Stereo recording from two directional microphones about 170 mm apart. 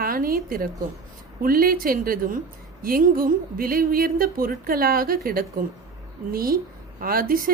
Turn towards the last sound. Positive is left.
turn(degrees=-60)  # may be behind; listen again after turning